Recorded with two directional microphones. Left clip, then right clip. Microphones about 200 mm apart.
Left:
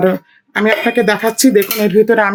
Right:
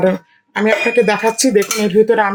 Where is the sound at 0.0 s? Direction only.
45° left (ahead or behind).